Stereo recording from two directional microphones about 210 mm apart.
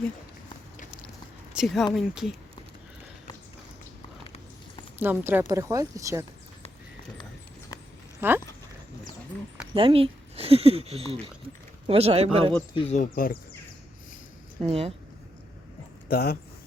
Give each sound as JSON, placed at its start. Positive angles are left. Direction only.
{"t": 1.5, "sound": "speech", "side_deg": 0}
{"t": 4.9, "sound": "speech", "side_deg": -10}
{"t": 9.7, "sound": "speech", "side_deg": -25}
{"t": 12.7, "sound": "speech", "side_deg": 30}
{"t": 14.6, "sound": "speech", "side_deg": -30}
{"t": 16.0, "sound": "speech", "side_deg": 45}